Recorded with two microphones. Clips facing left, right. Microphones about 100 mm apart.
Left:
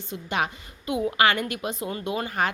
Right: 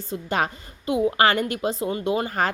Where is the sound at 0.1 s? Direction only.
40° right (ahead or behind).